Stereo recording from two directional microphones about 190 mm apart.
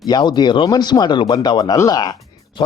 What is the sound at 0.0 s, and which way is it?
Speech, 20° left (ahead or behind).